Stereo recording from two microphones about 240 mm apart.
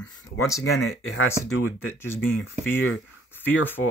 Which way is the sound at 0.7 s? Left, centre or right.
Left.